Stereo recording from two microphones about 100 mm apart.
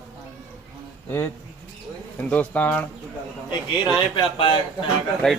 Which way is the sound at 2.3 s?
15° left (ahead or behind).